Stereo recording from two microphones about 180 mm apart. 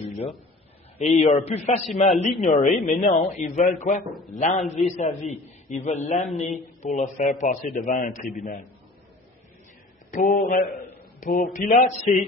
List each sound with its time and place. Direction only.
0.9 s a man's voice: 40° left (ahead or behind)
10.1 s speech: 45° left (ahead or behind)